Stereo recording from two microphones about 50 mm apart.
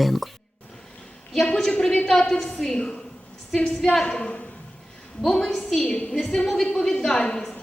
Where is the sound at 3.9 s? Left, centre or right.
Centre.